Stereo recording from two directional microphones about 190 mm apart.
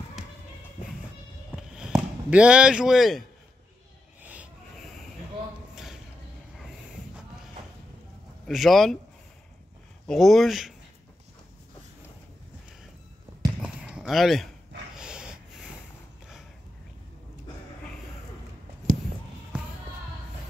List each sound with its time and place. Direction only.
0.2 s music: centre (ahead or behind)
1.8 s speech: 5° right (ahead or behind)
4.2 s owl: 10° right (ahead or behind)
8.5 s speech: centre (ahead or behind)
10.0 s speech: centre (ahead or behind)
13.6 s basketball bounce: 5° right (ahead or behind)
15.0 s dog: 5° right (ahead or behind)
18.9 s bleat: 45° right (ahead or behind)